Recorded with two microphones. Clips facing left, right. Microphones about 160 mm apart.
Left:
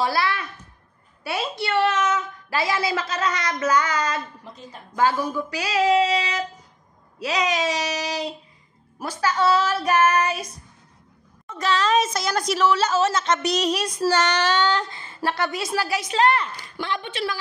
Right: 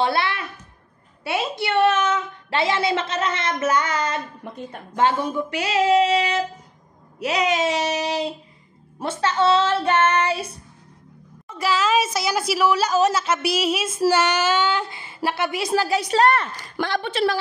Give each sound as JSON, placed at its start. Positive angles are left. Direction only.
{"t": 0.0, "sound": "a child's voice", "side_deg": -25}
{"t": 4.4, "sound": "a woman's voice", "side_deg": -60}
{"t": 4.9, "sound": "a woman's voice", "side_deg": -25}
{"t": 11.4, "sound": "a woman's voice", "side_deg": -10}
{"t": 15.7, "sound": "a woman's voice", "side_deg": -30}